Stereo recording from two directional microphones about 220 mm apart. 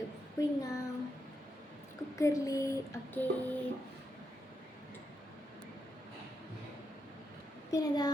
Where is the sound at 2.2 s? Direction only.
15° left (ahead or behind).